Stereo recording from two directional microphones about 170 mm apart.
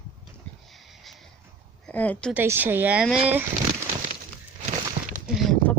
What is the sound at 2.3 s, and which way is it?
Speech, 10° right (ahead or behind).